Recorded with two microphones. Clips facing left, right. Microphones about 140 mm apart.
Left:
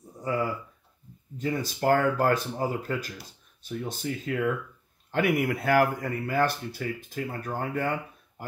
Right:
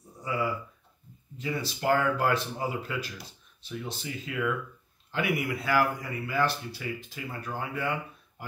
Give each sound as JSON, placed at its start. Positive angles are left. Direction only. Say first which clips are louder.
{"t": 0.2, "sound": "speech", "louder": "left 2 dB", "side_deg": 45}